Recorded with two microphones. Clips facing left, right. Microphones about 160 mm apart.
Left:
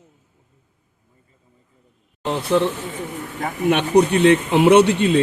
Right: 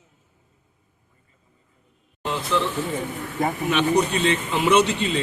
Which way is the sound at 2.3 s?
55° left (ahead or behind).